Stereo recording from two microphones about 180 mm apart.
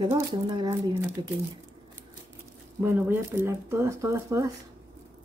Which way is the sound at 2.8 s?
10° right (ahead or behind).